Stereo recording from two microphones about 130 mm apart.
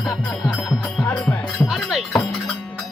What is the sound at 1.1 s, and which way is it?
Music, 10° left (ahead or behind).